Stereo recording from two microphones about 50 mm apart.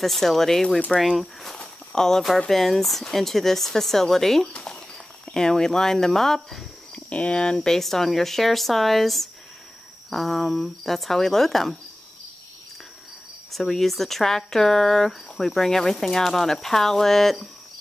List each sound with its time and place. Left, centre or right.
0.0 s speech: centre
1.6 s walk: centre
2.4 s speech: centre
4.5 s speech: centre
7.1 s speech: left; by 11.7 s centre
13.5 s speech: centre